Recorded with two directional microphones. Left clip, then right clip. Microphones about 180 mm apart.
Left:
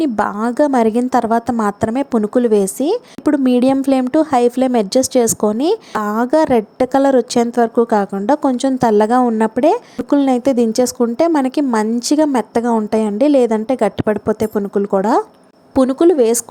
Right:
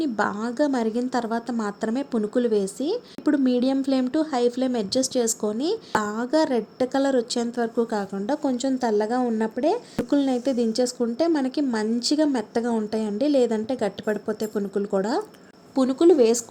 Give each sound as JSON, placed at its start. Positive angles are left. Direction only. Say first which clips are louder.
{"t": 0.0, "sound": "a woman's voice", "louder": "left 8 dB", "side_deg": 45}